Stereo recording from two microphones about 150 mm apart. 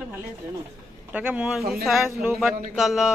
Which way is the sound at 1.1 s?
10° right (ahead or behind).